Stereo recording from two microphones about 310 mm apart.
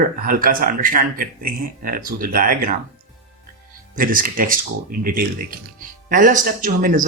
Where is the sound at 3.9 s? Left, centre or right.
Right.